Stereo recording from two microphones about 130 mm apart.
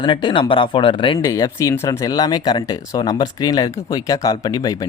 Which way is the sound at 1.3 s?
25° left (ahead or behind).